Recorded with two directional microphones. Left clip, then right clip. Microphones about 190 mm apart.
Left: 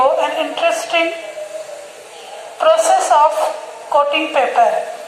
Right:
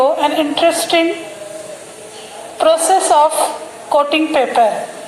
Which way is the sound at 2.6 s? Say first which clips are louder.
Even; 45° right (ahead or behind).